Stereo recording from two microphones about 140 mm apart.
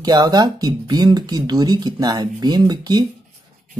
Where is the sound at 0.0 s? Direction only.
30° right (ahead or behind).